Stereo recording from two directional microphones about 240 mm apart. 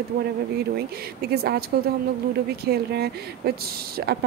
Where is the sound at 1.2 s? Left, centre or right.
Right.